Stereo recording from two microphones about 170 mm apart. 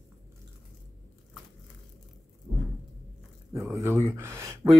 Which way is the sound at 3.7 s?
15° right (ahead or behind).